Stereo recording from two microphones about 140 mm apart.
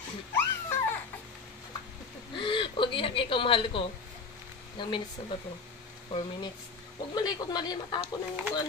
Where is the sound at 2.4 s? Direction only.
35° left (ahead or behind).